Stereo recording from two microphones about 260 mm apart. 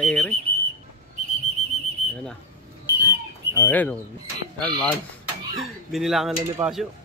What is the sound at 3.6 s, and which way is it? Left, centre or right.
Speech, centre.